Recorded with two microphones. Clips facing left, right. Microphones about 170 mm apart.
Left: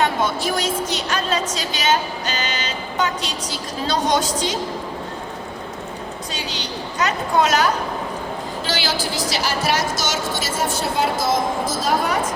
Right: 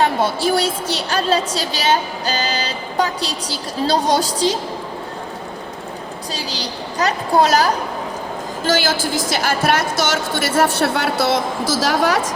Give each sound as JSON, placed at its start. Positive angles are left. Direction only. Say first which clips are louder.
{"t": 0.0, "sound": "a woman's voice", "louder": "right 3 dB", "side_deg": -30}
{"t": 6.3, "sound": "a woman's voice", "louder": "right 3 dB", "side_deg": -35}
{"t": 8.6, "sound": "a woman's voice", "louder": "right 7 dB", "side_deg": -50}